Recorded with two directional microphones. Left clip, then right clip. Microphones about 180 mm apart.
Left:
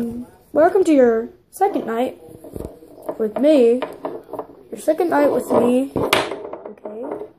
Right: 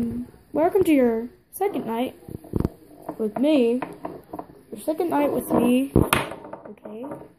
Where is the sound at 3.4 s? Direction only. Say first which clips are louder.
Left 7 dB; 10° left (ahead or behind).